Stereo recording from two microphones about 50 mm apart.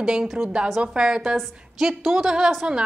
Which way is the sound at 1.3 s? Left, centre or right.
Centre.